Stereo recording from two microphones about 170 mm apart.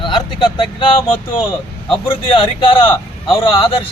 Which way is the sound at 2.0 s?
30° left (ahead or behind).